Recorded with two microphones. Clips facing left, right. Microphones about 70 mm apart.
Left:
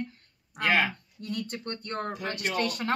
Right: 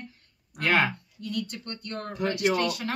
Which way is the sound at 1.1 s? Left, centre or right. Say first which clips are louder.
Right 1 dB; left.